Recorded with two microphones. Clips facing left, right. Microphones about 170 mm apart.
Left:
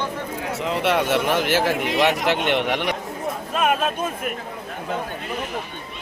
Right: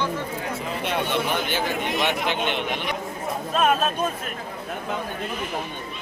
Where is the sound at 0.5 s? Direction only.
80° left.